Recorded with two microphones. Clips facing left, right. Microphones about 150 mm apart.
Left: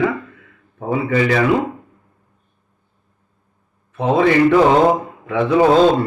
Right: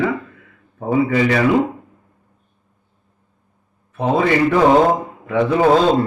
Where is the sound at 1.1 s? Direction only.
5° right (ahead or behind).